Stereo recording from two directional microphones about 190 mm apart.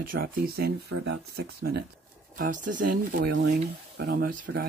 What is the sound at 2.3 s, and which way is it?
Speech, 45° right (ahead or behind).